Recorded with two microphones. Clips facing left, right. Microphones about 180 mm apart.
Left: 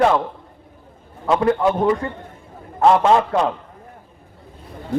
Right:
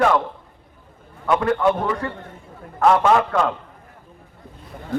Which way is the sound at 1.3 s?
25° left (ahead or behind).